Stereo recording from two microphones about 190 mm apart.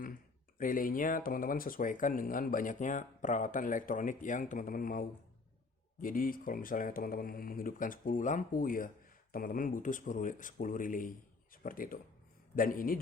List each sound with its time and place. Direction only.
0.6 s speech: 45° left (ahead or behind)